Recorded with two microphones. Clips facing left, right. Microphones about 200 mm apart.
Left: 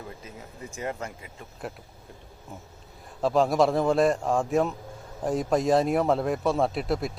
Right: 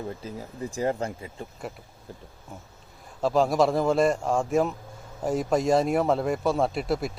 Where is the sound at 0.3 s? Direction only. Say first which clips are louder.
Right 7 dB; 35° right (ahead or behind).